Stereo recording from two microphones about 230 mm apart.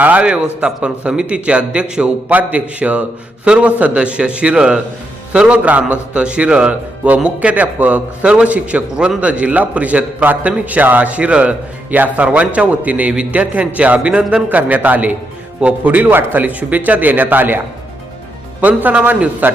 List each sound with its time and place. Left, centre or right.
0.0 s a man's voice: centre
18.6 s speech: centre